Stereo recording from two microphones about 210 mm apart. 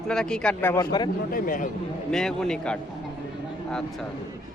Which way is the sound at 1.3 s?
40° left (ahead or behind).